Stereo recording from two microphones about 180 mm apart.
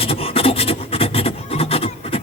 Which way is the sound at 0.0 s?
30° left (ahead or behind).